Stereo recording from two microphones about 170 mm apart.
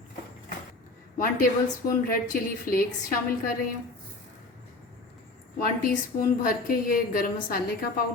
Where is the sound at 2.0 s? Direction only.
55° left (ahead or behind).